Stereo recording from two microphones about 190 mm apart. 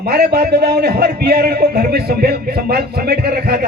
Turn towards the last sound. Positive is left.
turn(degrees=-55)  # may be behind; listen again after turning